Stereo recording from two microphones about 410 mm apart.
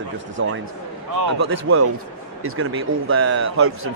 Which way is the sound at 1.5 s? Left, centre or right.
Right.